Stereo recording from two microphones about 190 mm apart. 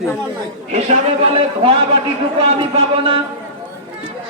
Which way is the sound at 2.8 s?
30° right (ahead or behind).